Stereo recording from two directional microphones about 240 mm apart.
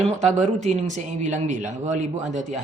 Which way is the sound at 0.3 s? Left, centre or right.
Right.